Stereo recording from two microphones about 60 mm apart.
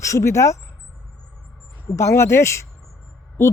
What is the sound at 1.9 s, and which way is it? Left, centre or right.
A man's voice, left.